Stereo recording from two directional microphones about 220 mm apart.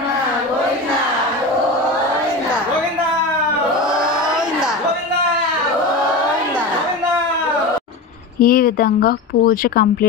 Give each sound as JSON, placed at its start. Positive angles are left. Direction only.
{"t": 8.4, "sound": "speech", "side_deg": 40}